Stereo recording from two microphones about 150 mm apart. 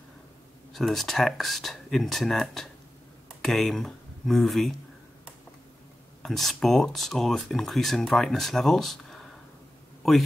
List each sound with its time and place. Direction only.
0.7 s speech: centre (ahead or behind)
6.2 s speech: centre (ahead or behind)